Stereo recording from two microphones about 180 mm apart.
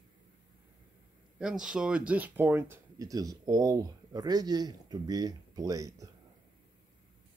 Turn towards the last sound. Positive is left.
turn(degrees=-20)  # may be behind; listen again after turning